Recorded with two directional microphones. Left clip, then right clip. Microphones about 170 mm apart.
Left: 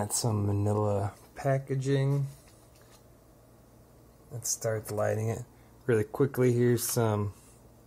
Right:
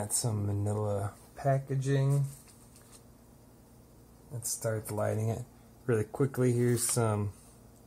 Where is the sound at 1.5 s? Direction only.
50° left (ahead or behind).